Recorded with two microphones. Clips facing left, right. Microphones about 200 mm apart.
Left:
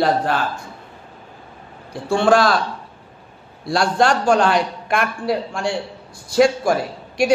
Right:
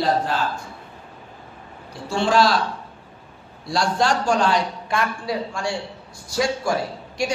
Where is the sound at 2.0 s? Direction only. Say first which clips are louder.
Left 4 dB; 55° left (ahead or behind).